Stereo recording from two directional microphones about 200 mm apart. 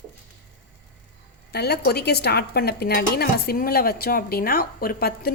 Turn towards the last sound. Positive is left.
turn(degrees=50)  # may be behind; listen again after turning